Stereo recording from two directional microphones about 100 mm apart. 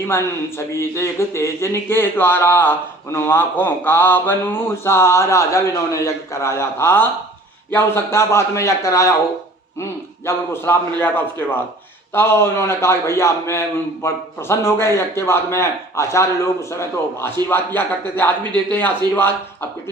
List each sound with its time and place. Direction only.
0.1 s speech: 25° left (ahead or behind)
10.2 s speech: 25° left (ahead or behind)